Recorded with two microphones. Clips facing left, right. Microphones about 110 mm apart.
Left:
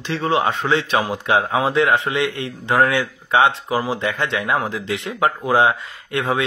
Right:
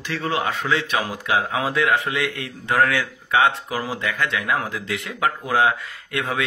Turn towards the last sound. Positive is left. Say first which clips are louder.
# left 4 dB
turn(degrees=25)  # may be behind; listen again after turning